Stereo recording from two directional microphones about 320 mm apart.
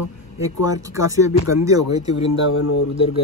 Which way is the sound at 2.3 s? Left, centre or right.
Left.